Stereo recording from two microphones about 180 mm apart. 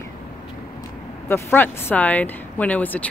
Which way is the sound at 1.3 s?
10° left (ahead or behind).